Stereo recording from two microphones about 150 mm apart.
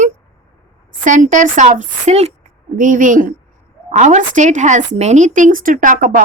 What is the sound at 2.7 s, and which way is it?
A woman's voice, 60° right (ahead or behind).